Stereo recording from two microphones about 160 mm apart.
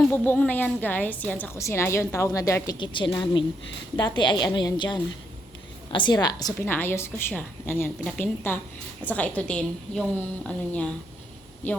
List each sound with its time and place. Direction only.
0.1 s a woman's voice: 10° left (ahead or behind)
2.7 s a woman's voice: 30° left (ahead or behind)
6.7 s a woman's voice: 15° left (ahead or behind)